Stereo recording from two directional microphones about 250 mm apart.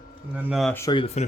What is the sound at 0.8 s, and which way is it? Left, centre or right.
Speech, centre.